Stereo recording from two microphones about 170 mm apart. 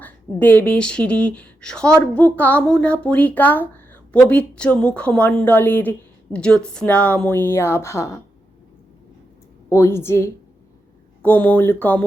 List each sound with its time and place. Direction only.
0.3 s speech: 10° left (ahead or behind)
9.6 s speech: 15° left (ahead or behind)